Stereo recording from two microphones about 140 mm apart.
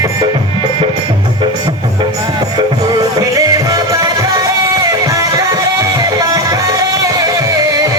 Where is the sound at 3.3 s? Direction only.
25° right (ahead or behind).